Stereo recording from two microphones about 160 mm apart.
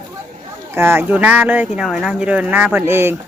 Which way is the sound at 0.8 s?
15° right (ahead or behind).